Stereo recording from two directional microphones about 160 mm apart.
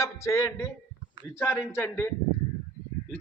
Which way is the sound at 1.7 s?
15° left (ahead or behind).